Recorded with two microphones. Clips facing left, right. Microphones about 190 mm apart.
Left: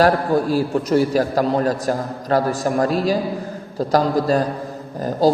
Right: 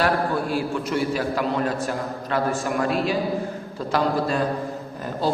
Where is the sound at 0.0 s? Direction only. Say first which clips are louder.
Left 6 dB; 40° left (ahead or behind).